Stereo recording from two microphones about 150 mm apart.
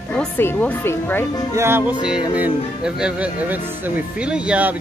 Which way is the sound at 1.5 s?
15° right (ahead or behind).